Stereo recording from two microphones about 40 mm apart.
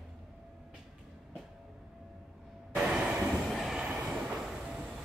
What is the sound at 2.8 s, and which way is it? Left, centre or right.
Train, right.